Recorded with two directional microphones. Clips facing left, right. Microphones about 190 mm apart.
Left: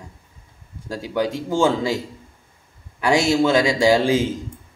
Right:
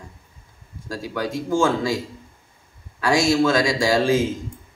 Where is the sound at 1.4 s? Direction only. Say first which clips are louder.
Even; 20° left (ahead or behind).